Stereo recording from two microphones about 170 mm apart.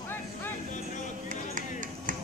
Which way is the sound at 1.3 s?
50° right (ahead or behind).